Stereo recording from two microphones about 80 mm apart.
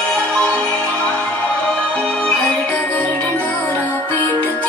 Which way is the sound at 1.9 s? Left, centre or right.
Centre.